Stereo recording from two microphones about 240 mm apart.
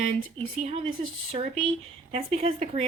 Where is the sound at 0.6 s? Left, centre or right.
Right.